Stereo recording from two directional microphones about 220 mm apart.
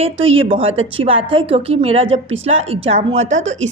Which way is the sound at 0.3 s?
25° right (ahead or behind).